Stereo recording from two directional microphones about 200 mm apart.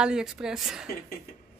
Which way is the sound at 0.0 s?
5° right (ahead or behind).